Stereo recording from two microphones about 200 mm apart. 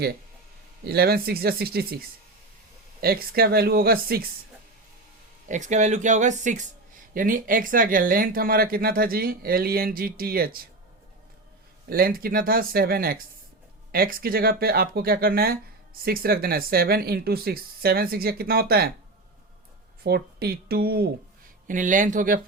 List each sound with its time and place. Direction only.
0.9 s speech: 50° right (ahead or behind)
5.5 s speech: 35° right (ahead or behind)
11.9 s speech: 45° right (ahead or behind)
20.1 s speech: 50° right (ahead or behind)
21.7 s speech: 40° right (ahead or behind)